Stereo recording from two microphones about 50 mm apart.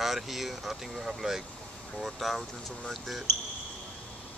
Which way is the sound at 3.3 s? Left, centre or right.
Left.